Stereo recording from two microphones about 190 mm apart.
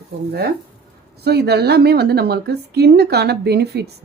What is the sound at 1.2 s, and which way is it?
A woman's voice, 60° right (ahead or behind).